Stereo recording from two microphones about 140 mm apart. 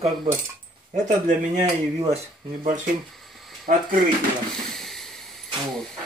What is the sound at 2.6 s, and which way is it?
Speech, 70° right (ahead or behind).